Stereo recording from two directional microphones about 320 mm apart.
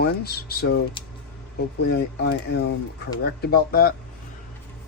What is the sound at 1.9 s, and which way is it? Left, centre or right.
Speech, left.